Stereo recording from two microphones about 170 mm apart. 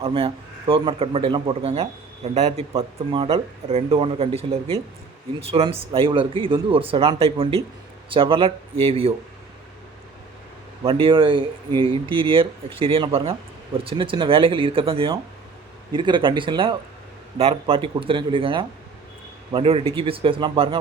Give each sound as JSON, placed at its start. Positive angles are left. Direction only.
{"t": 0.0, "sound": "a man's voice", "side_deg": -35}
{"t": 10.8, "sound": "a man's voice", "side_deg": -30}